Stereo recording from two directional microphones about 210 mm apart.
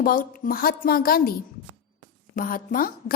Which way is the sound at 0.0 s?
45° left (ahead or behind).